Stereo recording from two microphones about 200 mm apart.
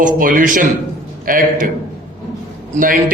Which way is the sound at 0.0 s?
45° right (ahead or behind).